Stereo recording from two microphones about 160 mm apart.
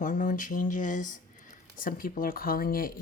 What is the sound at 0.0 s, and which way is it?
Speech, 55° left (ahead or behind).